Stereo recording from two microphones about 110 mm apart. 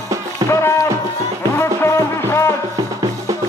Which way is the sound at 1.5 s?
25° left (ahead or behind).